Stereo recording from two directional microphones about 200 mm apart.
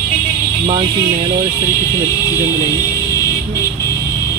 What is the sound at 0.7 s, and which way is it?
Speech, 25° right (ahead or behind).